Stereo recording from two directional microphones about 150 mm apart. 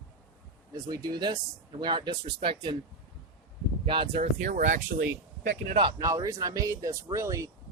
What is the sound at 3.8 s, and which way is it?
Speech, 35° right (ahead or behind).